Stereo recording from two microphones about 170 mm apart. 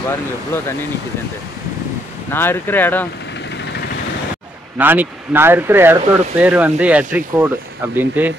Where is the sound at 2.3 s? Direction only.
15° left (ahead or behind).